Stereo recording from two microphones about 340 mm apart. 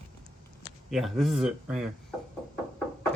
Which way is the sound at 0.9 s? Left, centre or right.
Centre.